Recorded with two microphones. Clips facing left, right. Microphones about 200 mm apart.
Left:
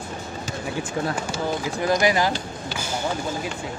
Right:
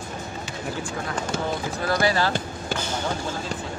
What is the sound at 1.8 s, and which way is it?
Speech, 15° left (ahead or behind).